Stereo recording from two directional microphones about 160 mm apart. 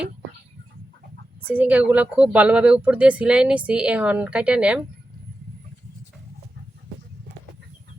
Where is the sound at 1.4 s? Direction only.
10° right (ahead or behind).